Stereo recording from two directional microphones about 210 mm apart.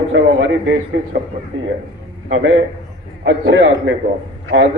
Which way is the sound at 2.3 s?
60° right (ahead or behind).